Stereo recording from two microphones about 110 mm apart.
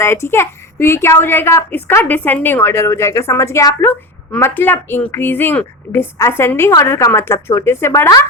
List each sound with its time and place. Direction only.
0.0 s a woman's voice: 25° left (ahead or behind)